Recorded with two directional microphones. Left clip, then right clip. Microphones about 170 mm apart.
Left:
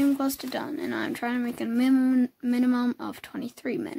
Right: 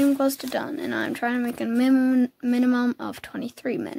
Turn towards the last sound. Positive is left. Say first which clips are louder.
# right 3 dB
turn(degrees=-15)  # may be behind; listen again after turning